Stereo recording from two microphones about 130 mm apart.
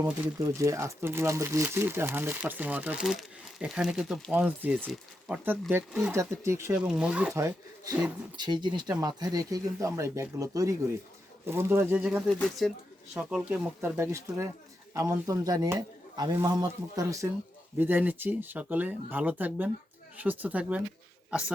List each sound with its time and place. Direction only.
0.0 s speech: 25° right (ahead or behind)
6.1 s speech: 20° right (ahead or behind)
6.7 s speech: 10° right (ahead or behind)
7.3 s speech: 20° right (ahead or behind)
8.4 s speech: 35° right (ahead or behind); by 12.2 s 10° right (ahead or behind)
12.3 s speech: 5° left (ahead or behind)
13.1 s speech: 10° right (ahead or behind)
13.9 s speech: 20° right (ahead or behind)
17.7 s speech: 15° right (ahead or behind)